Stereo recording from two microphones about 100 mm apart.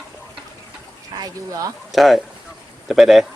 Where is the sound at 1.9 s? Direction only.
Centre (ahead or behind).